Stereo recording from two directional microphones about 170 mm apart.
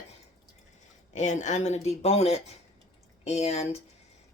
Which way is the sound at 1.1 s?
45° left (ahead or behind).